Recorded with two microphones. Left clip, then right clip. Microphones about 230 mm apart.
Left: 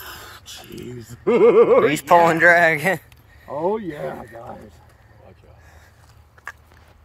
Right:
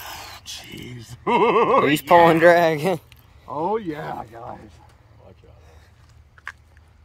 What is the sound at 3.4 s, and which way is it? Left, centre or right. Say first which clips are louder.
Speech: left 1 dB; right.